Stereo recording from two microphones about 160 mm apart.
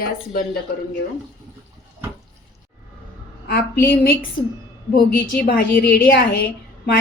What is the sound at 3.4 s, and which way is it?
Speech, 70° left (ahead or behind).